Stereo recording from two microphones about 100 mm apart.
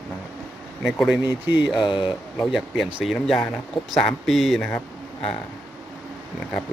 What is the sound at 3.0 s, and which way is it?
Speech, centre (ahead or behind).